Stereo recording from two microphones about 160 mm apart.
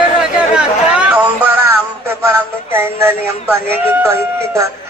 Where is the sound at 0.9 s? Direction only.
10° right (ahead or behind).